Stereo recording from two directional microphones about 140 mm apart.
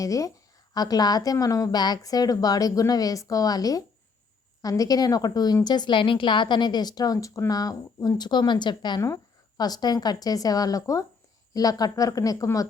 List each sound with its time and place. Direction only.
0.0 s a woman's voice: 25° left (ahead or behind)